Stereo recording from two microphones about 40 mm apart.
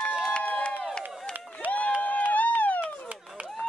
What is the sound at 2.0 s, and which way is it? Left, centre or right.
Run, left.